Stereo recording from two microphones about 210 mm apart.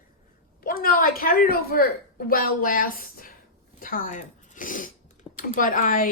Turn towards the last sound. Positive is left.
turn(degrees=40)  # may be behind; listen again after turning